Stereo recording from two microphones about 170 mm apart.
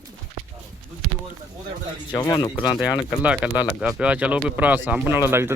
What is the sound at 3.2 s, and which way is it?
Speech, 5° right (ahead or behind).